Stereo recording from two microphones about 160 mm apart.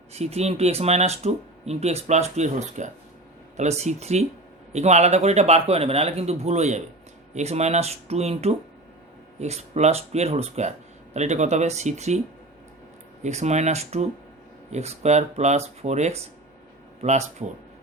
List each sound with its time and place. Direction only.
0.1 s speech: 40° right (ahead or behind)
13.2 s speech: 45° right (ahead or behind)